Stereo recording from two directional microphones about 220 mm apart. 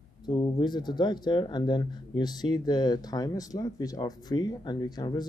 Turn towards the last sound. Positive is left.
turn(degrees=20)  # may be behind; listen again after turning